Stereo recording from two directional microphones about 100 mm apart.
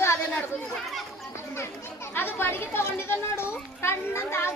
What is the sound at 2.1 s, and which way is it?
Speech, 20° left (ahead or behind).